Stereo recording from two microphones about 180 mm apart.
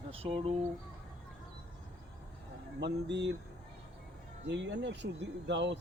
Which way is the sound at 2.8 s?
70° right (ahead or behind).